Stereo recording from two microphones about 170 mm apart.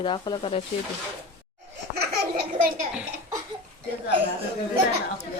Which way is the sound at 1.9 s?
65° right (ahead or behind).